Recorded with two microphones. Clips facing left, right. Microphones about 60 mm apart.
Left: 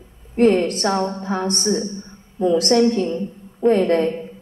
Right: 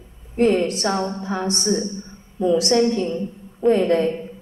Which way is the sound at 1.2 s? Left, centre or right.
Left.